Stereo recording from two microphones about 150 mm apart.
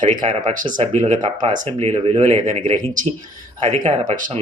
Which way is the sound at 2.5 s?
55° right (ahead or behind).